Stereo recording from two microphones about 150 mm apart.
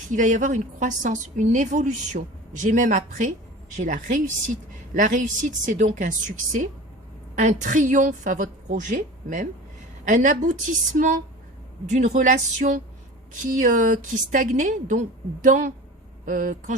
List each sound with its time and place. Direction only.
0.1 s a woman's voice: 60° right (ahead or behind)